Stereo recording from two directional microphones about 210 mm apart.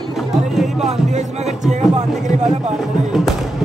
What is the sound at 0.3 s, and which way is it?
Speech, centre (ahead or behind).